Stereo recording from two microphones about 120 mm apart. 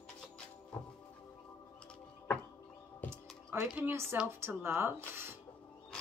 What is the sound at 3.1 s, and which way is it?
Music, 20° right (ahead or behind).